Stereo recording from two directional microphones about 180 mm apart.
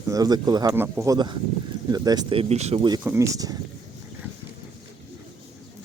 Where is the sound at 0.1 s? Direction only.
20° right (ahead or behind).